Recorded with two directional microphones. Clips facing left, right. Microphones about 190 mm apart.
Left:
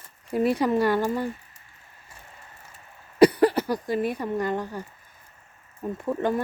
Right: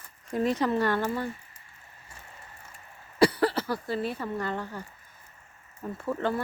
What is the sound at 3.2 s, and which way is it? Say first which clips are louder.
Speech: left 6 dB; 15° left (ahead or behind).